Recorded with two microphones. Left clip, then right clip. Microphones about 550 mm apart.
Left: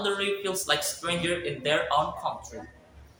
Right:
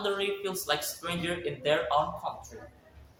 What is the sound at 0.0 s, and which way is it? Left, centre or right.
A man's voice, right.